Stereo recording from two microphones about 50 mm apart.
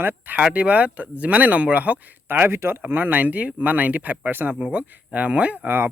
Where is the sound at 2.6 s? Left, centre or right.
Right.